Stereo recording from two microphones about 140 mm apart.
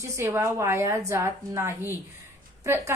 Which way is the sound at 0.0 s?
20° right (ahead or behind).